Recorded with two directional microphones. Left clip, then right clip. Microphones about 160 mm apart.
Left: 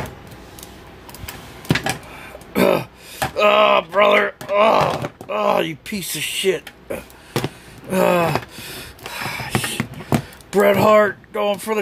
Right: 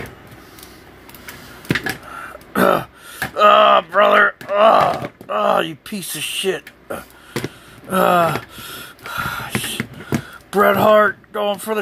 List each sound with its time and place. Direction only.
2.5 s speech: centre (ahead or behind)
8.6 s a sound: centre (ahead or behind)
10.5 s speech: centre (ahead or behind)